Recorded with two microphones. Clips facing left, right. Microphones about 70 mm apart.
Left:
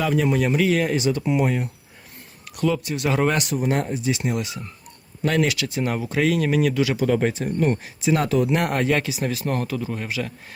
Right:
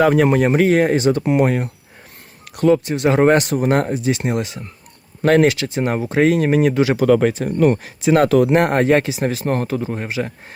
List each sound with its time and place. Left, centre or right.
0.0 s speech: right
2.6 s speech: right
7.0 s speech: right
8.4 s speech: right